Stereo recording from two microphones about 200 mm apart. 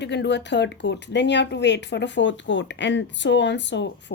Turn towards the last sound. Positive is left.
turn(degrees=65)  # may be behind; listen again after turning